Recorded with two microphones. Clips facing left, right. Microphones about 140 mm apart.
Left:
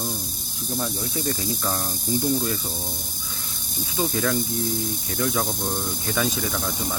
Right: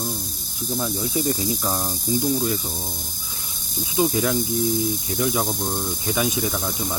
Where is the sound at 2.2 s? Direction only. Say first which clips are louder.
Right 1 dB; centre (ahead or behind).